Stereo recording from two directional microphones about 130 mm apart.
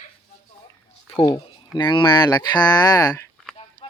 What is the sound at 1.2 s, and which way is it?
Speech, 30° left (ahead or behind).